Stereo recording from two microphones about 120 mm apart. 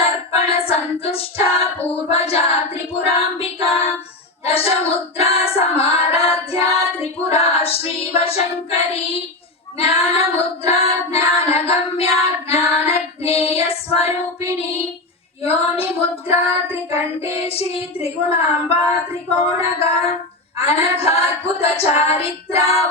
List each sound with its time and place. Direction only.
0.0 s female singing: 55° left (ahead or behind)
2.0 s child singing: 55° left (ahead or behind)
15.4 s child singing: 55° left (ahead or behind)